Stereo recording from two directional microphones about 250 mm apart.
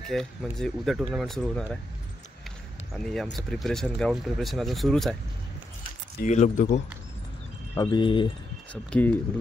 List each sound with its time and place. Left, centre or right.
0.1 s speech: centre
2.9 s speech: centre
6.2 s speech: left
7.7 s speech: centre
8.9 s speech: centre